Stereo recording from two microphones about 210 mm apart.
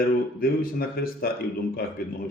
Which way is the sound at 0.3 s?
45° left (ahead or behind).